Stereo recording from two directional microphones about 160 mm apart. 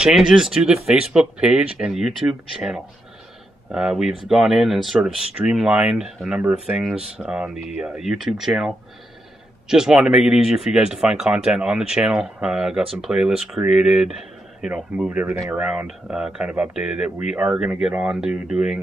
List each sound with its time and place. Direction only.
0.0 s speech: 5° right (ahead or behind)